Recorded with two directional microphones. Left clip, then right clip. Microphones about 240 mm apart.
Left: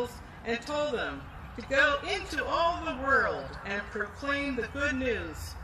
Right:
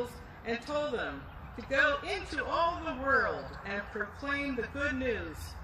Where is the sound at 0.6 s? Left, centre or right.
Left.